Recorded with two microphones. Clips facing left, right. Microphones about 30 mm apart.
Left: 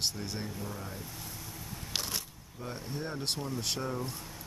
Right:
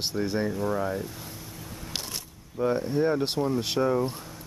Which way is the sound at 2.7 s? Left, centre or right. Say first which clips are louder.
Right 11 dB; right.